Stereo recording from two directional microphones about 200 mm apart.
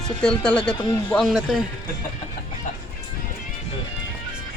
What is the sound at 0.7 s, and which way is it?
Speech, 20° left (ahead or behind).